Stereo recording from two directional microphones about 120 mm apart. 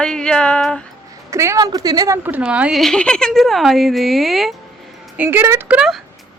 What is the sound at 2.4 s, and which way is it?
Speech, 10° right (ahead or behind).